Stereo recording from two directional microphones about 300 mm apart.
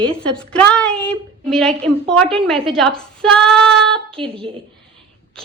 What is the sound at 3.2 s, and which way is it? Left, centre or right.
Female singing, centre.